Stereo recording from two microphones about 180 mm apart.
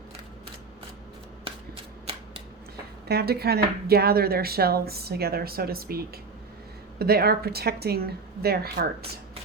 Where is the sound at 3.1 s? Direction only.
60° right (ahead or behind).